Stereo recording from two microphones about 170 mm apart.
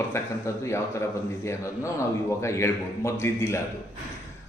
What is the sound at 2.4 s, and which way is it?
A man's voice, 15° left (ahead or behind).